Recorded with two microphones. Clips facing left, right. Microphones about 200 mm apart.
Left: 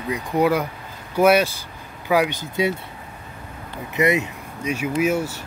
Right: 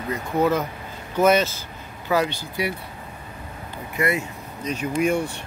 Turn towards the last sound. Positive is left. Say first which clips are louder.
# left 1 dB
turn(degrees=5)  # may be behind; listen again after turning